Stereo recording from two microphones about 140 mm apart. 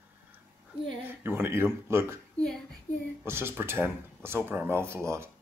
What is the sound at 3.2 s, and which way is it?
Speech, 15° right (ahead or behind).